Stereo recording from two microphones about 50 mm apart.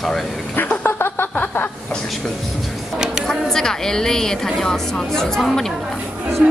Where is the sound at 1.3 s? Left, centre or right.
Left.